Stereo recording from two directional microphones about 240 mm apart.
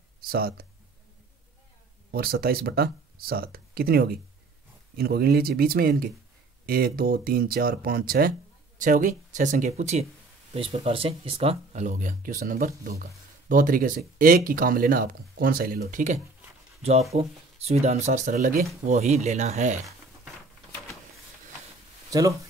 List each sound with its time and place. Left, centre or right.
0.2 s speech: right
2.0 s speech: right
17.2 s speech: right